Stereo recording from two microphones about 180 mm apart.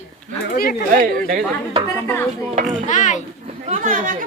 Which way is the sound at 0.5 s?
55° left (ahead or behind).